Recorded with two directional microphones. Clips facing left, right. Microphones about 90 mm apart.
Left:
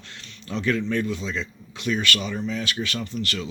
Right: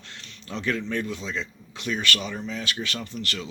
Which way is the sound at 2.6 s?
35° right (ahead or behind).